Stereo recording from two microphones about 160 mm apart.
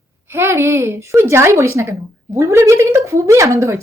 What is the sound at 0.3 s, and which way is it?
A woman's voice, 15° right (ahead or behind).